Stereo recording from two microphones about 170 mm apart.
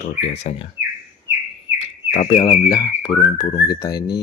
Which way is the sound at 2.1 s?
40° left (ahead or behind).